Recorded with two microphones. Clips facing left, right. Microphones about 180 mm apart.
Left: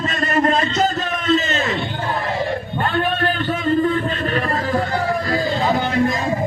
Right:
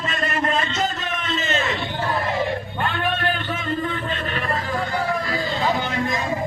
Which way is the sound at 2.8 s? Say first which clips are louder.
Left 4 dB; 40° left (ahead or behind).